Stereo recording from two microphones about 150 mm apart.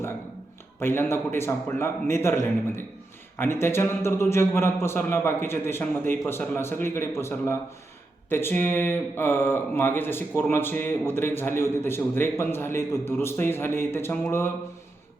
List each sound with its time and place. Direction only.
0.8 s speech: 15° left (ahead or behind)